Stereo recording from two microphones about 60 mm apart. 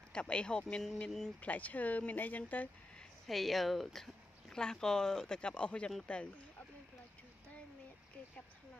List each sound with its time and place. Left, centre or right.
0.1 s speech: centre
1.4 s speech: left
3.3 s speech: centre